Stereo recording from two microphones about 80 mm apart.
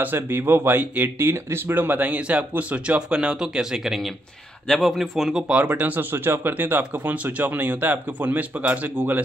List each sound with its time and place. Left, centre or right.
0.0 s speech: right; by 5.4 s centre
5.5 s speech: centre